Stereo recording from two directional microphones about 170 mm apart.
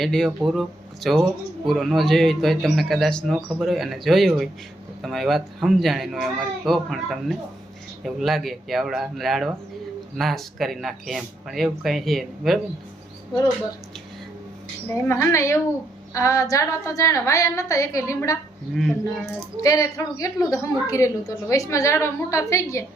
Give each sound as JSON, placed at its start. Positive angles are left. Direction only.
{"t": 0.0, "sound": "speech", "side_deg": 0}
{"t": 14.9, "sound": "a woman's voice", "side_deg": 15}
{"t": 18.8, "sound": "speech", "side_deg": 0}
{"t": 19.6, "sound": "a woman's voice", "side_deg": 20}